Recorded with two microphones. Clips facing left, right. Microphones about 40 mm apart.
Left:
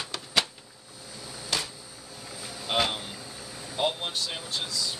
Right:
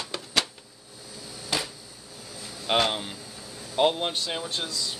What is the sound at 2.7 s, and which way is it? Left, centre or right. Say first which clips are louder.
Speech: right 3 dB; right.